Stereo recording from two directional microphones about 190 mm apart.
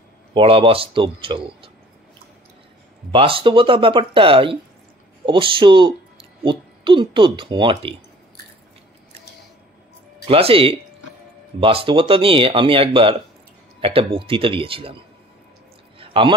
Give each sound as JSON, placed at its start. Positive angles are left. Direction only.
{"t": 0.3, "sound": "speech", "side_deg": -30}
{"t": 3.1, "sound": "speech", "side_deg": -30}
{"t": 10.2, "sound": "speech", "side_deg": -30}
{"t": 16.0, "sound": "a sound", "side_deg": -25}